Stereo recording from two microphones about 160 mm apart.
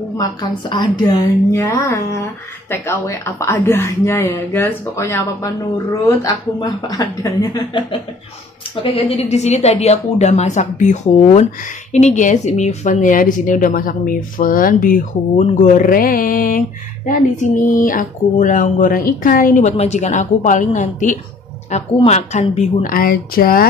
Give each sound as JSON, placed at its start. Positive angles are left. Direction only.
{"t": 0.2, "sound": "a woman's voice", "side_deg": 25}
{"t": 8.9, "sound": "a woman's voice", "side_deg": 40}
{"t": 19.8, "sound": "a woman's voice", "side_deg": 45}